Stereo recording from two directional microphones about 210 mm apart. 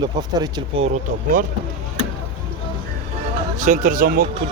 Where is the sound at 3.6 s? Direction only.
35° right (ahead or behind).